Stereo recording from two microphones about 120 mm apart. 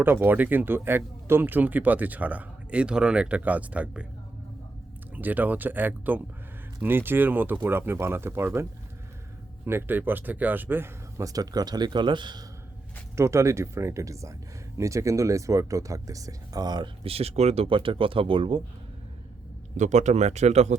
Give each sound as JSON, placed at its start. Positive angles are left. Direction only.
{"t": 0.0, "sound": "speech", "side_deg": -15}
{"t": 5.1, "sound": "speech", "side_deg": -15}
{"t": 9.6, "sound": "speech", "side_deg": -20}
{"t": 13.1, "sound": "speech", "side_deg": -25}
{"t": 19.7, "sound": "speech", "side_deg": -80}